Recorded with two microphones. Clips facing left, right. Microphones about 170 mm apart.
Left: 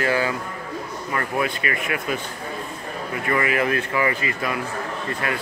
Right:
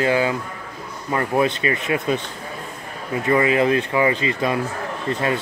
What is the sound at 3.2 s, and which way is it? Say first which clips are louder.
Speech: right 5 dB; 25° right (ahead or behind).